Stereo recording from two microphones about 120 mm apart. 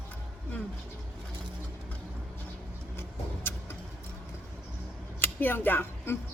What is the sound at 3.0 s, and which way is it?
Vehicle, 20° left (ahead or behind).